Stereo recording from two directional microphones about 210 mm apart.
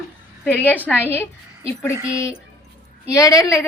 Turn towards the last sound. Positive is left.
turn(degrees=15)  # may be behind; listen again after turning